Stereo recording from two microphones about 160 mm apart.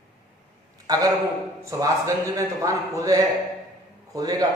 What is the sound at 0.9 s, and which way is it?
A man's voice, 20° right (ahead or behind).